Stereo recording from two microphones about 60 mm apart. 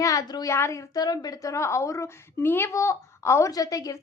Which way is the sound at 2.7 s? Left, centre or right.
Left.